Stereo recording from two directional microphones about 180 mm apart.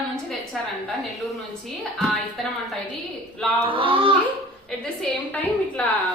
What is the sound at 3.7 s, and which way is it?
Speech, 30° right (ahead or behind).